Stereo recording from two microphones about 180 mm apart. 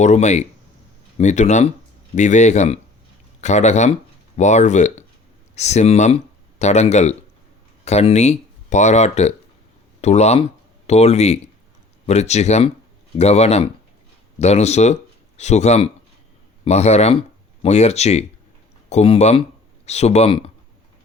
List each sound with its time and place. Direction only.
0.0 s speech: 40° left (ahead or behind)